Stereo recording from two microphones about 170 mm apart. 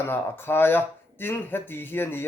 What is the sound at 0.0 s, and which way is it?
Speech, 15° left (ahead or behind).